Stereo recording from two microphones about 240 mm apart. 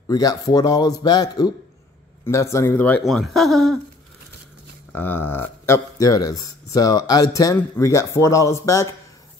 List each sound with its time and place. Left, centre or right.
0.1 s speech: centre
4.9 s speech: centre